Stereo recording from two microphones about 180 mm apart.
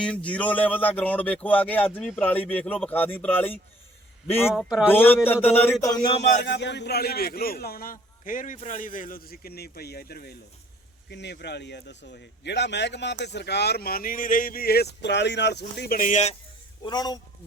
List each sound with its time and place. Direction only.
0.0 s speech: 5° left (ahead or behind)
6.3 s a man's voice: 70° left (ahead or behind)
11.1 s a man's voice: 70° left (ahead or behind); by 16.3 s 45° left (ahead or behind)
16.8 s speech: 25° left (ahead or behind)